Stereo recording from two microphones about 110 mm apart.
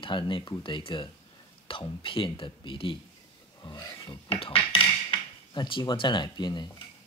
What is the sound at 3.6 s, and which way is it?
Speech, 40° left (ahead or behind).